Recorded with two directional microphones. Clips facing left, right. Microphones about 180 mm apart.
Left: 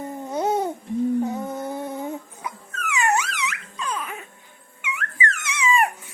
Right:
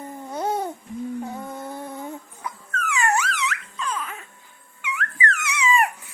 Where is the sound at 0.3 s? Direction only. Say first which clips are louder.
Left 3 dB; 20° left (ahead or behind).